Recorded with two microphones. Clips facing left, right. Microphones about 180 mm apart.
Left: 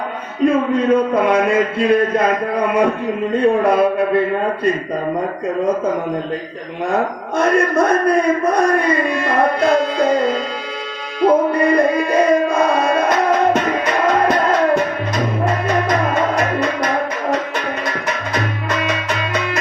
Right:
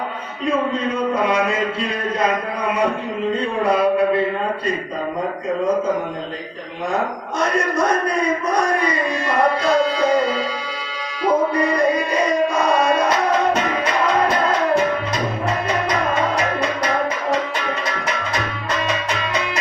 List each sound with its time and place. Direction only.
0.4 s music: 55° left (ahead or behind)
3.4 s music: 55° left (ahead or behind)
7.3 s music: 55° left (ahead or behind)